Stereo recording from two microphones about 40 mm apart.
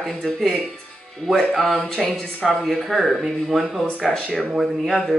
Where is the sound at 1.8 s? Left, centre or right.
Centre.